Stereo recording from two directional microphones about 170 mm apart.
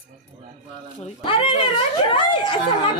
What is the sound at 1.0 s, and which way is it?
Speech, 30° left (ahead or behind).